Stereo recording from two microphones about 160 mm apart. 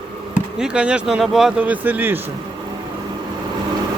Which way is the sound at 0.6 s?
5° right (ahead or behind).